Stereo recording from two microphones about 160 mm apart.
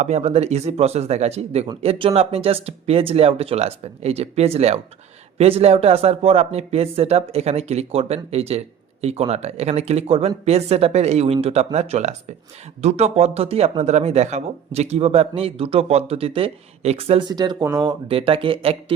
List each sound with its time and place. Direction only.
0.0 s speech: 45° right (ahead or behind)